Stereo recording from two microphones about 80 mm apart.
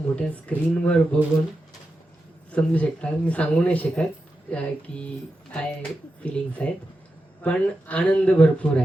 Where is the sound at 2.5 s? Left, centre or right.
Centre.